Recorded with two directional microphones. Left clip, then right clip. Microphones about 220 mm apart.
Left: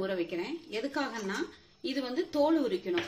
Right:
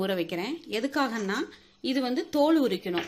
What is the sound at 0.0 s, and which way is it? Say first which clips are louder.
A woman's voice: right 4 dB; 50° right (ahead or behind).